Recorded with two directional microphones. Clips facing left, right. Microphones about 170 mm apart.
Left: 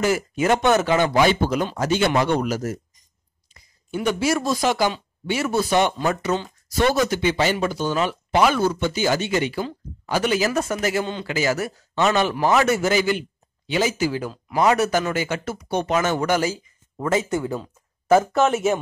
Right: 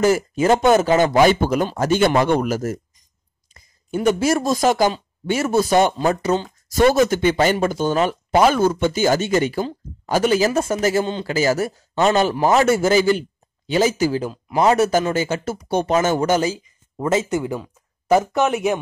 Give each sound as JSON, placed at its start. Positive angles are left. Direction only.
{"t": 0.0, "sound": "a man's voice", "side_deg": -40}
{"t": 0.9, "sound": "speech", "side_deg": -45}
{"t": 10.4, "sound": "a man's voice", "side_deg": -30}
{"t": 14.2, "sound": "speech", "side_deg": -25}